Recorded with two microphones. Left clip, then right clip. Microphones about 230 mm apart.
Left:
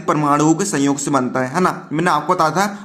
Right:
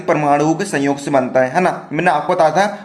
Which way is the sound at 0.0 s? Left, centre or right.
Left.